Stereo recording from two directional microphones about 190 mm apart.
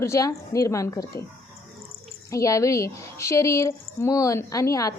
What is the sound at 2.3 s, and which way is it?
A woman's voice, 15° left (ahead or behind).